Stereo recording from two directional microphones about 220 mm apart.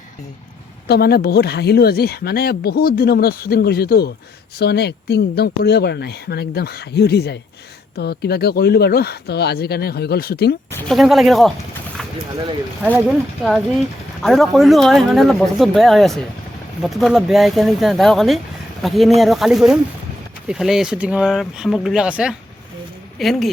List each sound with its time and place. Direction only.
0.9 s speech: 45° left (ahead or behind)
10.7 s speech: 10° left (ahead or behind)
10.9 s speech: centre (ahead or behind)
14.2 s speech: centre (ahead or behind)